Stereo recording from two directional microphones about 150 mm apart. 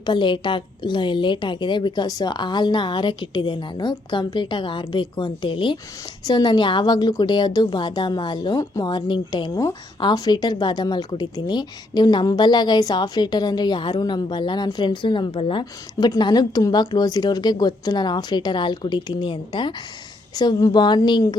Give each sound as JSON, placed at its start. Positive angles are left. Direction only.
{"t": 0.0, "sound": "a woman's voice", "side_deg": 30}